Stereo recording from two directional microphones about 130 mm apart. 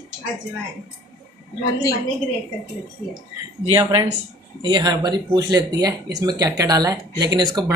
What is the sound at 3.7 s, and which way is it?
Speech, 30° right (ahead or behind).